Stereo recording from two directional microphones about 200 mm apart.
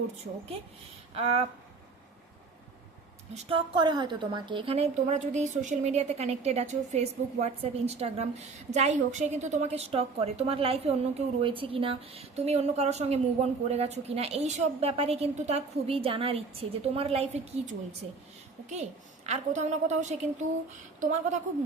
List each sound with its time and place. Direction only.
1.1 s speech: 30° right (ahead or behind)
3.3 s a woman's voice: 25° right (ahead or behind)